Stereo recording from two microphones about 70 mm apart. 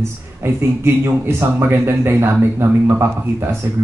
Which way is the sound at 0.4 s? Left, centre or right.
Right.